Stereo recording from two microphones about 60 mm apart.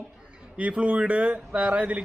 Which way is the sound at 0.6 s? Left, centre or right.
Right.